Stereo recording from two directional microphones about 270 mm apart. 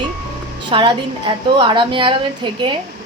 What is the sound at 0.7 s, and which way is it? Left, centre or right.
A woman's voice, centre.